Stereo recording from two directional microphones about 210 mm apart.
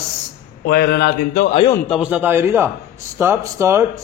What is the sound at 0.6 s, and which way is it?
Speech, 50° left (ahead or behind).